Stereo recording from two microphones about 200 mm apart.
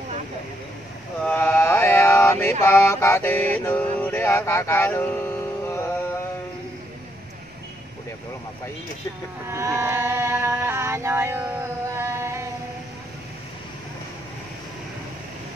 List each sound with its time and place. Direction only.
1.2 s mantra: 10° left (ahead or behind)
2.6 s music: 15° left (ahead or behind)
9.5 s a sound: 15° right (ahead or behind)